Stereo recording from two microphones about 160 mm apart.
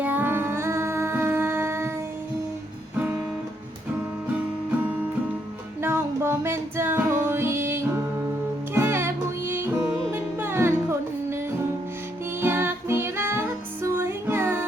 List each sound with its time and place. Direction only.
0.0 s music: 10° right (ahead or behind)
5.8 s music: 15° right (ahead or behind)
12.4 s music: 15° right (ahead or behind)